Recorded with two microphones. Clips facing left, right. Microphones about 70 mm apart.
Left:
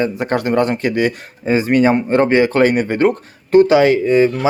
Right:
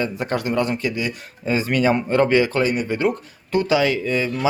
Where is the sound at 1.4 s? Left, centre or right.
Left.